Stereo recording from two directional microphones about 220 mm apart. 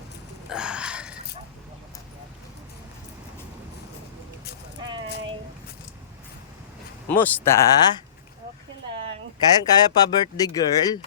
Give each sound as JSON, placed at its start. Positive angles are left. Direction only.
{"t": 0.5, "sound": "a sound", "side_deg": -5}
{"t": 7.1, "sound": "speech", "side_deg": 10}
{"t": 9.6, "sound": "speech", "side_deg": 15}